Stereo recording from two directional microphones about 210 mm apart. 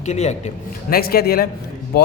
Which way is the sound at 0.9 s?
45° left (ahead or behind).